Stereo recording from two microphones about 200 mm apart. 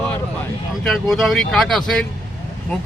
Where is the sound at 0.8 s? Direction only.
Centre (ahead or behind).